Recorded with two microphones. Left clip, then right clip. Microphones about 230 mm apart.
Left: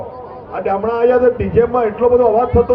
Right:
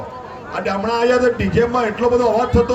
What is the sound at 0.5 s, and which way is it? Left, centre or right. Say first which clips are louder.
A man's voice: left 2 dB; right.